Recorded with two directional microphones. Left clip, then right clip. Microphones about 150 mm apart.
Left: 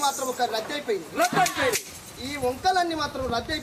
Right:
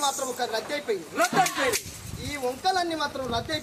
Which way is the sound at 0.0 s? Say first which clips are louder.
Left 2 dB; centre (ahead or behind).